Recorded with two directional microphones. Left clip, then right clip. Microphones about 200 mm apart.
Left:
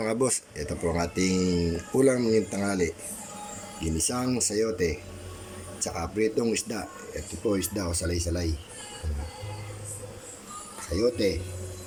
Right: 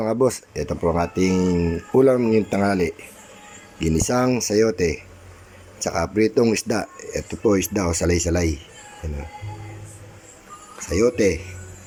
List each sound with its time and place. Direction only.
0.2 s speech: 15° right (ahead or behind)